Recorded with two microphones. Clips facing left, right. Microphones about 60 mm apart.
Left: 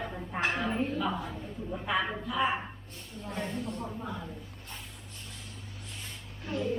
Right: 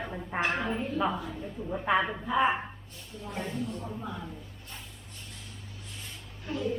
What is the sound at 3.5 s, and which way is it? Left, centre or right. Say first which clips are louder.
Speech: right 1 dB; left.